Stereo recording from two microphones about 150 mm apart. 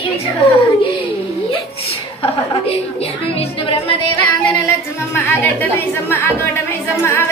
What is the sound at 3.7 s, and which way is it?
Music, 35° left (ahead or behind).